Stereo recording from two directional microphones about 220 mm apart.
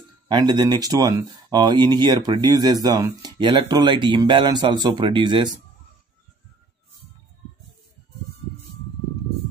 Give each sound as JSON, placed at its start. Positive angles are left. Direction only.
{"t": 0.3, "sound": "speech", "side_deg": -20}